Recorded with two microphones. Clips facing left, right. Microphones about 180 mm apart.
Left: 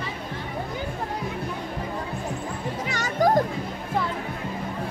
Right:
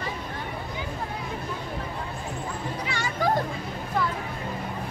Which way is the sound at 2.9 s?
40° left (ahead or behind).